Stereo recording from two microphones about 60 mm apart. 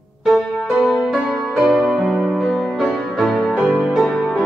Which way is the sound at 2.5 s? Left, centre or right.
Centre.